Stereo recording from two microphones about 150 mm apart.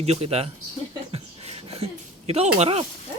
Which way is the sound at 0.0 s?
45° right (ahead or behind).